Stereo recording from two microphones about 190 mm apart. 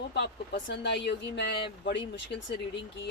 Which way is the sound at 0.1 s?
65° left (ahead or behind).